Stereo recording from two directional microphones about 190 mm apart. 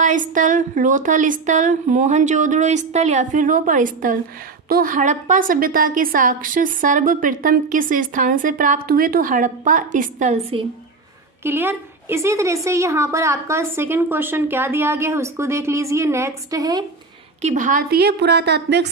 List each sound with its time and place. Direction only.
0.0 s a woman's voice: 40° right (ahead or behind)
11.4 s a woman's voice: 10° right (ahead or behind)
17.4 s a woman's voice: 40° right (ahead or behind); by 18.9 s 60° right (ahead or behind)